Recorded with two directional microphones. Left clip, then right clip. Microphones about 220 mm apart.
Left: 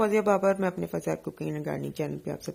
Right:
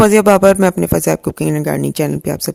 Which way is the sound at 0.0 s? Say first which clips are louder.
Right 15 dB; 45° right (ahead or behind).